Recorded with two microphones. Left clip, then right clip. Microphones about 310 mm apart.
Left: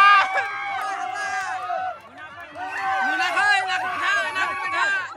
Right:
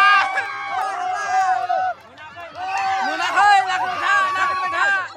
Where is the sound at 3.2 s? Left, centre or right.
Right.